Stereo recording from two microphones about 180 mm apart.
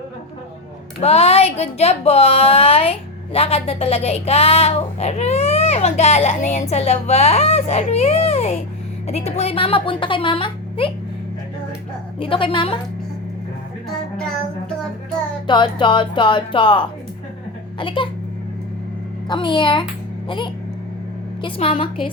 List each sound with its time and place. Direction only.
0.9 s speech: 35° left (ahead or behind)
12.2 s speech: 30° left (ahead or behind)
15.4 s speech: 25° left (ahead or behind)
19.3 s speech: 25° left (ahead or behind)